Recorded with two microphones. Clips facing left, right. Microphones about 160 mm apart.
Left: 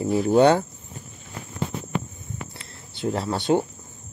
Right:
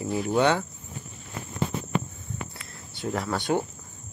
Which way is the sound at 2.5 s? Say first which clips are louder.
Left 1 dB; 25° left (ahead or behind).